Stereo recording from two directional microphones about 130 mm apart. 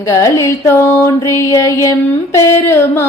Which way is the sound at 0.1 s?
25° left (ahead or behind).